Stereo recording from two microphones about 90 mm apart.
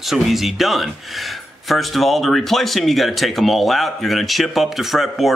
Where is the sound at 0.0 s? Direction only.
Centre (ahead or behind).